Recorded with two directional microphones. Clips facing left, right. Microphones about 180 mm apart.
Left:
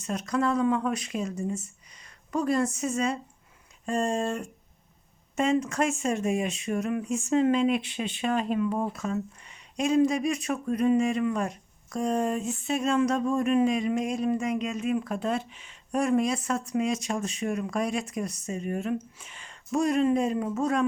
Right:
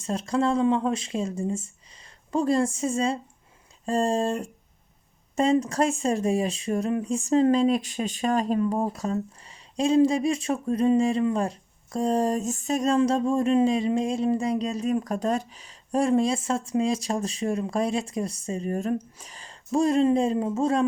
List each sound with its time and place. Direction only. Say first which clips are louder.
0.0 s speech: right 2 dB; 30° right (ahead or behind)